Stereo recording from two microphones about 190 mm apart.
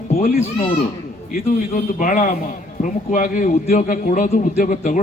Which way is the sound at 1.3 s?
45° left (ahead or behind).